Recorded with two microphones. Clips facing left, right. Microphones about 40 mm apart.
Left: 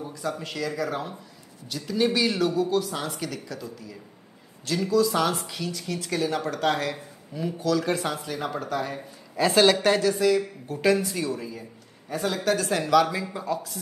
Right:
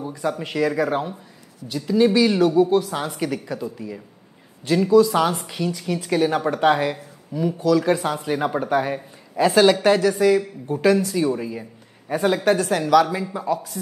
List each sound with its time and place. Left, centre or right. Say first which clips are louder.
0.2 s speech: right 8 dB; right
1.7 s speech: right 7 dB; centre
2.9 s speech: right 6 dB; right
6.0 s speech: right 7 dB; right
7.3 s speech: right 6 dB; centre
8.2 s speech: right 8 dB; right
9.4 s speech: right 4 dB; centre
12.7 s speech: right 2 dB; centre